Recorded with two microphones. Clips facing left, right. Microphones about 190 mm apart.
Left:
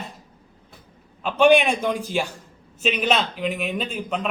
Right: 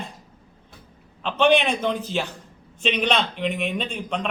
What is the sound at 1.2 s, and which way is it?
A man's voice, 10° left (ahead or behind).